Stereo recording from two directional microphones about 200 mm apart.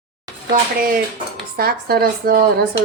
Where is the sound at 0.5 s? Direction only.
45° right (ahead or behind).